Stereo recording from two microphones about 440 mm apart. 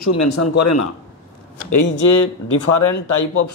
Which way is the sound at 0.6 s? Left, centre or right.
Left.